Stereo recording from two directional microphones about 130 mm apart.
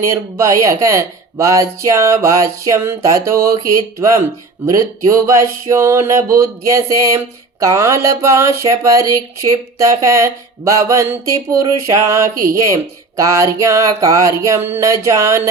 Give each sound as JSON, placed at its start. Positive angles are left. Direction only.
{"t": 0.0, "sound": "speech", "side_deg": -25}